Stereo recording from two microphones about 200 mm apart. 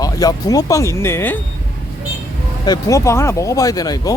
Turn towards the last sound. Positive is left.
turn(degrees=20)  # may be behind; listen again after turning